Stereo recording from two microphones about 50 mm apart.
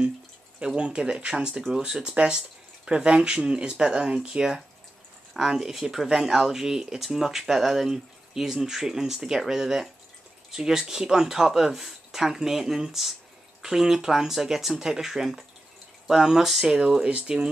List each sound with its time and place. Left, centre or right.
0.7 s speech: centre
5.3 s speech: centre